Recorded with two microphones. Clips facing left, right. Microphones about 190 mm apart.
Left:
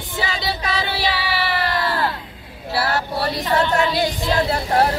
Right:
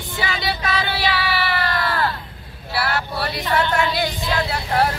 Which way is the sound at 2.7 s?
40° left (ahead or behind).